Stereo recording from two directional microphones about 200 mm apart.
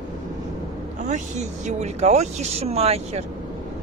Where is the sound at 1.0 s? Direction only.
35° right (ahead or behind).